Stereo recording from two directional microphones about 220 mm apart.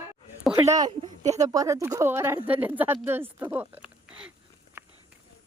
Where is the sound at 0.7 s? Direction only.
15° right (ahead or behind).